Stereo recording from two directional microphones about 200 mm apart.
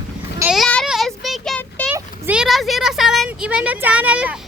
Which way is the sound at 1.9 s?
5° right (ahead or behind).